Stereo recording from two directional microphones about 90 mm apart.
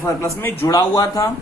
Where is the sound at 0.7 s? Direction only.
45° left (ahead or behind).